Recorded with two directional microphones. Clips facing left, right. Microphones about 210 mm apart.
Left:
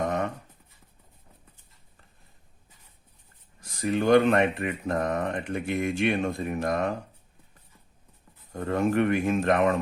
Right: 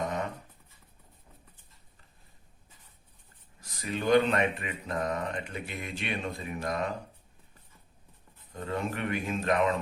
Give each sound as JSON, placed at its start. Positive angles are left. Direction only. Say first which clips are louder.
{"t": 3.8, "sound": "speech", "louder": "left 4 dB", "side_deg": 50}
{"t": 8.5, "sound": "speech", "louder": "left 9 dB", "side_deg": 55}